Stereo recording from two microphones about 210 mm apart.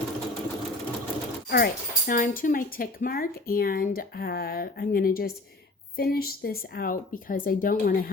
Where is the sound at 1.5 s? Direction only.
45° left (ahead or behind).